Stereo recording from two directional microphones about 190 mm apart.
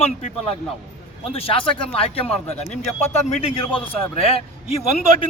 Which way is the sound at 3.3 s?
30° left (ahead or behind).